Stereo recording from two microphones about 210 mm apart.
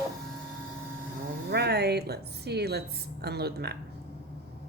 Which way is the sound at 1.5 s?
50° right (ahead or behind).